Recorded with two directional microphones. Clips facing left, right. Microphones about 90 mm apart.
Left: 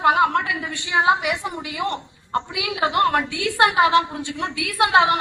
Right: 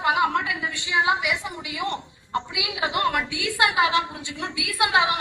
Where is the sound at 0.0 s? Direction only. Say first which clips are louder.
Left 4 dB; 45° left (ahead or behind).